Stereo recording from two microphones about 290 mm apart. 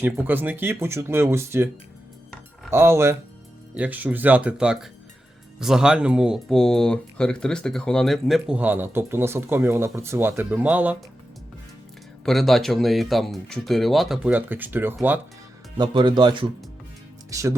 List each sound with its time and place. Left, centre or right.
0.0 s speech: centre
12.2 s speech: centre